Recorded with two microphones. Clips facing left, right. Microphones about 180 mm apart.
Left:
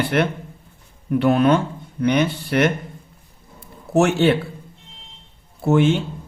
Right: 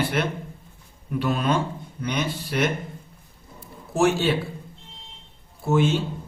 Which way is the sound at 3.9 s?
65° left (ahead or behind).